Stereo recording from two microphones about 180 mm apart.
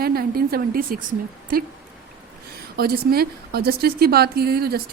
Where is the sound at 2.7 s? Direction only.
60° right (ahead or behind).